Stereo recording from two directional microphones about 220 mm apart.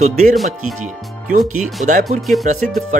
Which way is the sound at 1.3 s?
35° right (ahead or behind).